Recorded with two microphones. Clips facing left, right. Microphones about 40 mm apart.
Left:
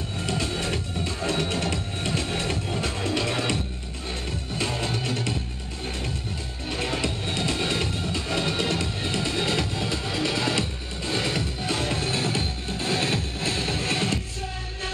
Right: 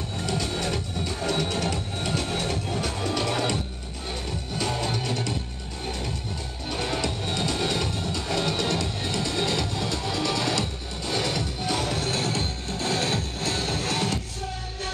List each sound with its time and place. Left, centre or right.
0.3 s music: left
1.4 s music: left
4.6 s music: left
6.7 s music: left